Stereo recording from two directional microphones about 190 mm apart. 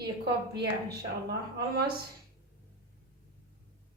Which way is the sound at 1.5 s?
55° right (ahead or behind).